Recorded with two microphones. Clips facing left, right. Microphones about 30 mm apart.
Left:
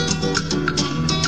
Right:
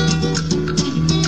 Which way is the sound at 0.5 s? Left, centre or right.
Centre.